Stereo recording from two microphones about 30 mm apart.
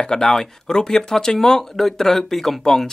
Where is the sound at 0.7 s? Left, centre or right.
Left.